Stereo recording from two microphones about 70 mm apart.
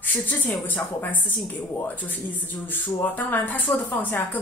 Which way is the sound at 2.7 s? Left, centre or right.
Left.